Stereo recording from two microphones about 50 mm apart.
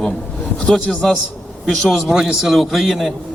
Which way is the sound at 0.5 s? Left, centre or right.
Centre.